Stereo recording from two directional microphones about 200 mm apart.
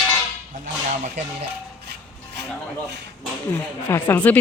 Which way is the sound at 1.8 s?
55° right (ahead or behind).